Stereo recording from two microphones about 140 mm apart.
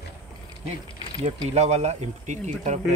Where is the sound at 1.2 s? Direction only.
50° right (ahead or behind).